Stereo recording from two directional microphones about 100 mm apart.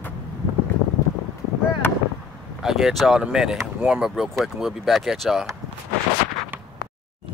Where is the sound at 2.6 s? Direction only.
5° right (ahead or behind).